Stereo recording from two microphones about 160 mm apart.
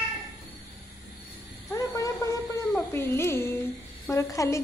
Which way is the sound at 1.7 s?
20° left (ahead or behind).